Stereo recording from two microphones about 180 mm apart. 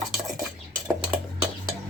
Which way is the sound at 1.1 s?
5° right (ahead or behind).